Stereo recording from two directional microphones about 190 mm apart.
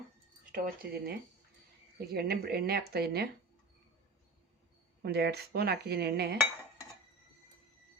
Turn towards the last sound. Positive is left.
turn(degrees=-60)  # may be behind; listen again after turning